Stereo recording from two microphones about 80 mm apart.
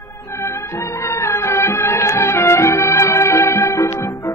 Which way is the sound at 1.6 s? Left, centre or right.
Left.